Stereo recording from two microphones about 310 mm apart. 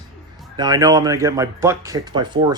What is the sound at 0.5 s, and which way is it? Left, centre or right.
Speech, centre.